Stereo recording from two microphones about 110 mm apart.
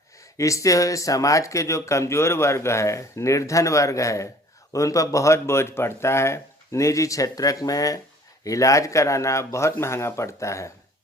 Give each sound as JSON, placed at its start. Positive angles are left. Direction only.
{"t": 0.3, "sound": "speech", "side_deg": 30}